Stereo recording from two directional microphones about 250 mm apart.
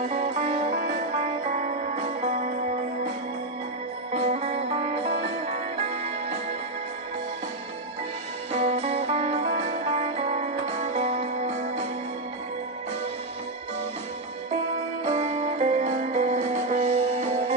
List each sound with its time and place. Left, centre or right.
0.0 s music: right
4.1 s music: right
8.5 s music: right
15.0 s music: right